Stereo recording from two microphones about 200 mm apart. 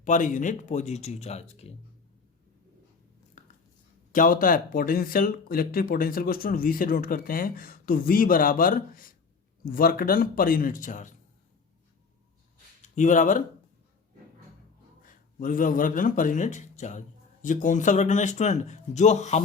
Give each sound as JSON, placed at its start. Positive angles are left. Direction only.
{"t": 0.0, "sound": "a man's voice", "side_deg": 40}
{"t": 3.4, "sound": "a sound", "side_deg": 35}
{"t": 4.1, "sound": "speech", "side_deg": 45}
{"t": 13.0, "sound": "a man's voice", "side_deg": 40}
{"t": 15.0, "sound": "a man's voice", "side_deg": 45}